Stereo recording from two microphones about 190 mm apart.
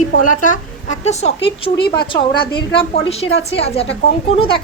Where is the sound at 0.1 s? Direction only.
45° left (ahead or behind).